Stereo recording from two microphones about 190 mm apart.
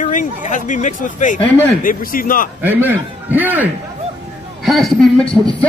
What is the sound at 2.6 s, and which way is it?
A man's voice, 10° right (ahead or behind).